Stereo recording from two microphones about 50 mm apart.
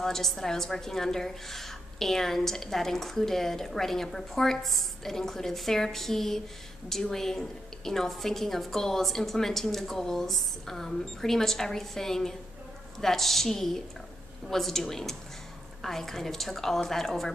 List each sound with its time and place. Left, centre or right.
0.0 s a woman's voice: centre